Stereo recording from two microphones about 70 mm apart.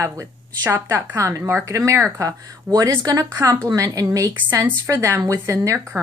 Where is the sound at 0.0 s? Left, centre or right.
Right.